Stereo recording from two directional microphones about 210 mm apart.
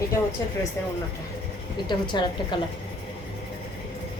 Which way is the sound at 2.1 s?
20° left (ahead or behind).